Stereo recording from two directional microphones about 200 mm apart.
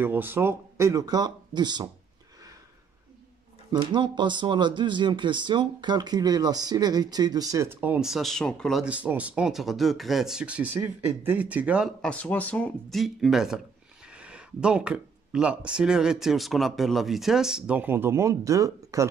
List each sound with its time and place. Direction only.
0.0 s speech: 10° right (ahead or behind)
3.7 s speech: 20° right (ahead or behind)